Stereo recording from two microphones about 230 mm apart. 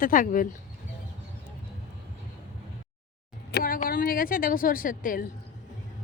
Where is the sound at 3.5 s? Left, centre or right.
Left.